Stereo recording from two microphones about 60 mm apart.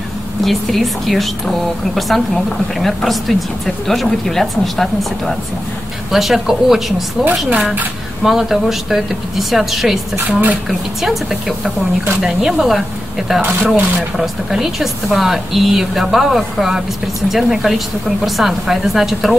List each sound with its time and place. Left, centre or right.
0.5 s a woman's voice: centre
10.2 s speech: right
10.7 s a woman's voice: centre
13.4 s speech: right
14.1 s a woman's voice: centre